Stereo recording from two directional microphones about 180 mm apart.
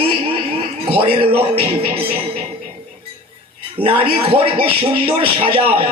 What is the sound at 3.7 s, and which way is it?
A man's voice, 30° right (ahead or behind).